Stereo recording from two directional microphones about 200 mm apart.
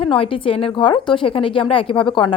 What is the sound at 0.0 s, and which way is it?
A woman's voice, 25° left (ahead or behind).